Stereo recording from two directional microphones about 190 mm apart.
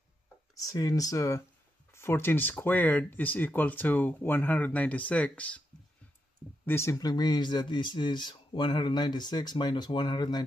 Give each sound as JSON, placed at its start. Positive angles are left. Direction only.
{"t": 0.6, "sound": "speech", "side_deg": 20}
{"t": 6.6, "sound": "speech", "side_deg": 15}